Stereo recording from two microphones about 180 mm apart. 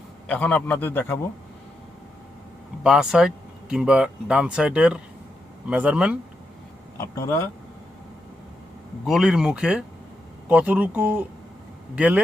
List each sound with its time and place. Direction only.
0.3 s a man's voice: 5° left (ahead or behind)
2.8 s speech: 5° right (ahead or behind)
7.0 s a man's voice: 15° left (ahead or behind)
9.0 s speech: centre (ahead or behind)